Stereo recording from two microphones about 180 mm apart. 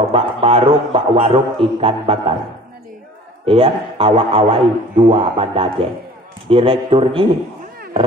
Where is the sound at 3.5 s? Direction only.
30° right (ahead or behind).